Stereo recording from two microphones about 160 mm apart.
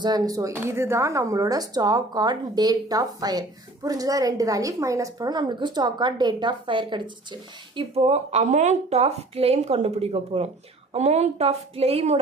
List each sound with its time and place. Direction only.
0.0 s a woman's voice: 25° right (ahead or behind)